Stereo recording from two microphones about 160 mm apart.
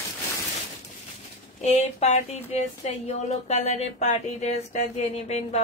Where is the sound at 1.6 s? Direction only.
40° left (ahead or behind).